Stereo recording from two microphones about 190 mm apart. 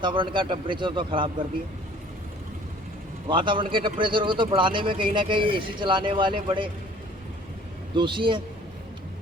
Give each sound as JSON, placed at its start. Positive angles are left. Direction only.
{"t": 0.0, "sound": "speech", "side_deg": -25}
{"t": 3.2, "sound": "speech", "side_deg": -25}
{"t": 7.9, "sound": "speech", "side_deg": -25}